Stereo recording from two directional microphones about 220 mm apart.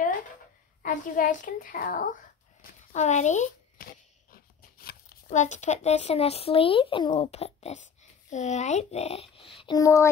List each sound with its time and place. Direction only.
0.8 s a woman's voice: 40° left (ahead or behind); by 10.0 s 15° left (ahead or behind)